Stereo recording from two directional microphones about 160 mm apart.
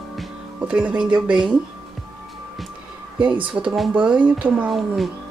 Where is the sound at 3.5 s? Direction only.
5° right (ahead or behind).